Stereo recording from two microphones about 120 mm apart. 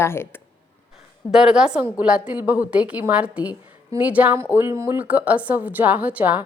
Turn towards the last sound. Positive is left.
turn(degrees=-10)  # may be behind; listen again after turning